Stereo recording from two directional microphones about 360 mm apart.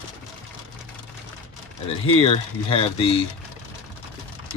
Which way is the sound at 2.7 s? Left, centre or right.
Centre.